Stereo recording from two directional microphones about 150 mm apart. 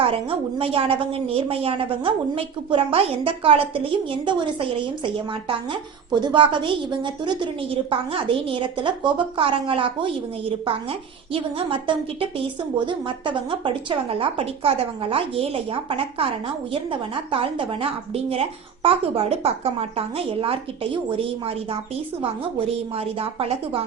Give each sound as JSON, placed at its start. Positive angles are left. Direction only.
{"t": 0.0, "sound": "a woman's voice", "side_deg": -40}
{"t": 12.8, "sound": "a woman's voice", "side_deg": -35}